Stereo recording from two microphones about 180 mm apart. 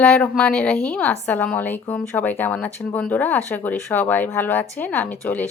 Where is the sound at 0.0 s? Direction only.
10° left (ahead or behind).